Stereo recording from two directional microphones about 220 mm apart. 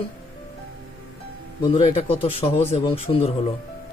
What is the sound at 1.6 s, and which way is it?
A man's voice, 25° left (ahead or behind).